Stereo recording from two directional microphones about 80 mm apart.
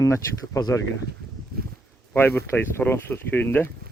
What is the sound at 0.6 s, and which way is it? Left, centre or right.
Speech, left.